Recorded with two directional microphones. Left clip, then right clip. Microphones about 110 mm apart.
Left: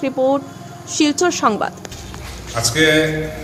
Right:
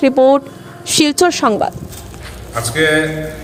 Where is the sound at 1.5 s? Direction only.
40° right (ahead or behind).